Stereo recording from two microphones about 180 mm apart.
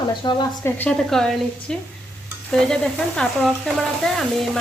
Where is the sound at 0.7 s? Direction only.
5° left (ahead or behind).